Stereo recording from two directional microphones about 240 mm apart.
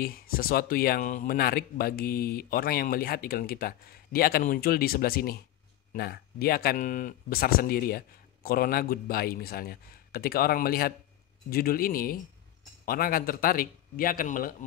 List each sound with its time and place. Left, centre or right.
0.0 s speech: left